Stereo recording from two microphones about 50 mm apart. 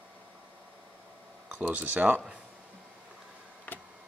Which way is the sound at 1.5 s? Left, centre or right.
Right.